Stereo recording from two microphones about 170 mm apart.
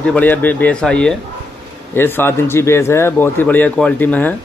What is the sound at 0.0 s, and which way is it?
A man's voice, 10° left (ahead or behind).